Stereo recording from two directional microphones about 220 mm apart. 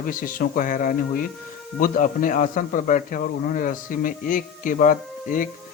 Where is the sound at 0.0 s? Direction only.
40° left (ahead or behind).